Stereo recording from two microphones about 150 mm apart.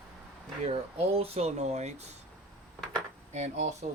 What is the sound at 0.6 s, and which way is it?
Speech, 40° right (ahead or behind).